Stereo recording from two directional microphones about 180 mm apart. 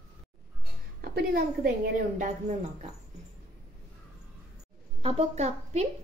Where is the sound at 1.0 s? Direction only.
60° right (ahead or behind).